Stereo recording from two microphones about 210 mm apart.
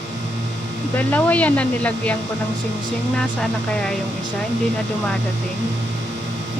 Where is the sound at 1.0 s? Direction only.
10° left (ahead or behind).